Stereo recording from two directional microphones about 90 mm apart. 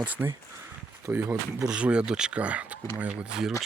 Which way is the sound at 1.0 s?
30° right (ahead or behind).